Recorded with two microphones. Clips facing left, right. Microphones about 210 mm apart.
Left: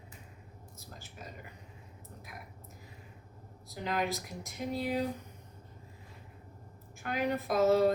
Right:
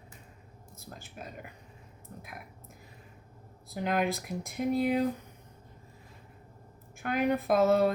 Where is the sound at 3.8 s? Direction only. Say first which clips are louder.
Right 4 dB; 55° right (ahead or behind).